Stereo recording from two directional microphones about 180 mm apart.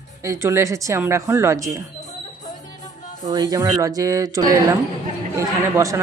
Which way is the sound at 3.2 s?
20° right (ahead or behind).